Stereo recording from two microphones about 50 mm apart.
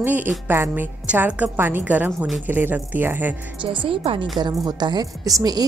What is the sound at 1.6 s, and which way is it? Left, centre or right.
Speech, right.